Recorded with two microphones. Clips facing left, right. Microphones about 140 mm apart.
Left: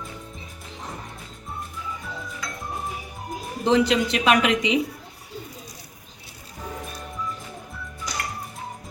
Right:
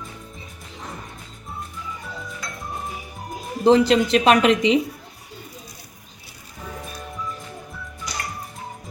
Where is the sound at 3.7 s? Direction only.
35° right (ahead or behind).